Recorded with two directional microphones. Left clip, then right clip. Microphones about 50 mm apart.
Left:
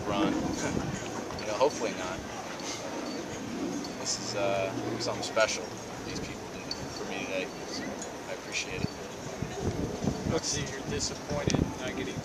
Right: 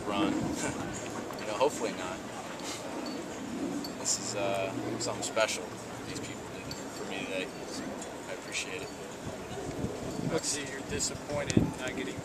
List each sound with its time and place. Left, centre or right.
0.1 s speech: centre
4.0 s speech: centre
11.3 s speech: right